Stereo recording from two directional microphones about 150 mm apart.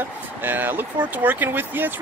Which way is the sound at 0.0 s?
15° right (ahead or behind).